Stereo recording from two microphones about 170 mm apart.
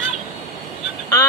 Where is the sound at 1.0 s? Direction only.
15° left (ahead or behind).